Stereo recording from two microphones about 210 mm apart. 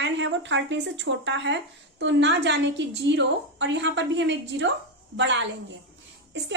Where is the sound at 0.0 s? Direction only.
60° right (ahead or behind).